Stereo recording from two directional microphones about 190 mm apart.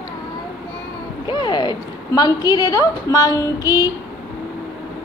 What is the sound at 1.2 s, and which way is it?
A woman's voice, 25° left (ahead or behind).